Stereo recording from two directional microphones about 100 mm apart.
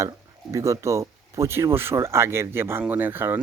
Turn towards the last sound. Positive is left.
turn(degrees=-20)  # may be behind; listen again after turning